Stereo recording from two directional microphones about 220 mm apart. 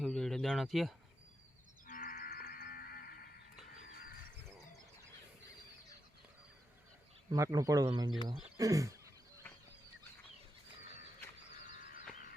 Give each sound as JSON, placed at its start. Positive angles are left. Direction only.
{"t": 0.0, "sound": "bird", "side_deg": 0}
{"t": 1.9, "sound": "cattle", "side_deg": 40}
{"t": 7.3, "sound": "a man's voice", "side_deg": -15}
{"t": 11.7, "sound": "a sound", "side_deg": 40}